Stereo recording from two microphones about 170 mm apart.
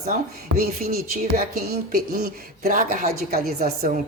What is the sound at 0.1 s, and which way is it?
Speech, 60° right (ahead or behind).